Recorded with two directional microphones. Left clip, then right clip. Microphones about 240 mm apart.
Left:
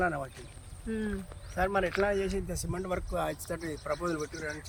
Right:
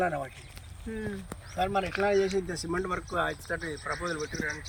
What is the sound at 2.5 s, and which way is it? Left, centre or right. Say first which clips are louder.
Speech: right 3 dB; left.